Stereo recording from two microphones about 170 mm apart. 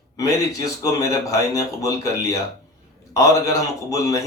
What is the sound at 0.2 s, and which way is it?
Speech, 20° left (ahead or behind).